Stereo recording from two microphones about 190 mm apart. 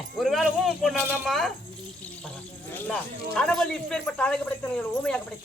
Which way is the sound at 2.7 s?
5° left (ahead or behind).